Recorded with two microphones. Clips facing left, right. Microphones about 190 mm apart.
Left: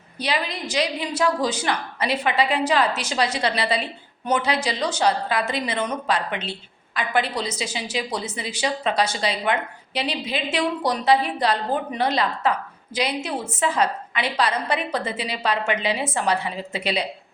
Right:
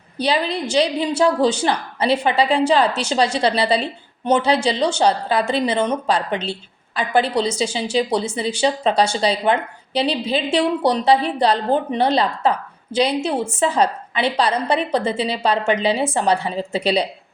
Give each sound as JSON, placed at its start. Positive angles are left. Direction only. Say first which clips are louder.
{"t": 0.2, "sound": "a woman's voice", "louder": "right 6 dB", "side_deg": -30}